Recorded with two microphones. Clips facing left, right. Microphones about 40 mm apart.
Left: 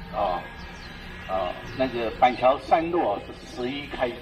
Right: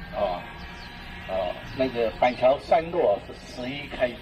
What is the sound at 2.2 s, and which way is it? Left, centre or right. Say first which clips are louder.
Speech: left 2 dB; left.